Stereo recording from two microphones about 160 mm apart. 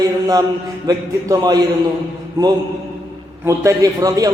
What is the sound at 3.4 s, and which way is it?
Speech, 20° right (ahead or behind).